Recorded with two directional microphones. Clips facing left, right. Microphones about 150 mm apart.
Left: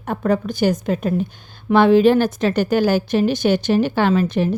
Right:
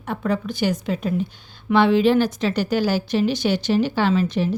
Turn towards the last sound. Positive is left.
turn(degrees=55)  # may be behind; listen again after turning